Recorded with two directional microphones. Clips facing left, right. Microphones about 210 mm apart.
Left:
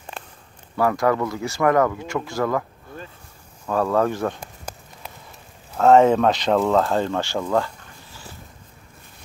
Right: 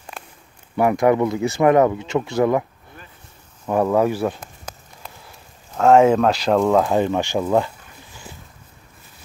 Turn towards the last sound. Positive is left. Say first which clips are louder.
# right 3 dB
turn(degrees=-20)  # may be behind; listen again after turning